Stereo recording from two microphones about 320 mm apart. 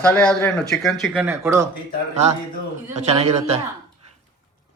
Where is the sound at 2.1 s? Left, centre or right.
Right.